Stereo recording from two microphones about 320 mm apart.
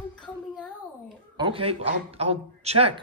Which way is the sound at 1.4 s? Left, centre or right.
Centre.